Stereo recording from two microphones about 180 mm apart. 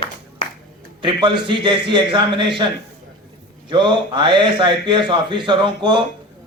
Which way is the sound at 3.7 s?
25° right (ahead or behind).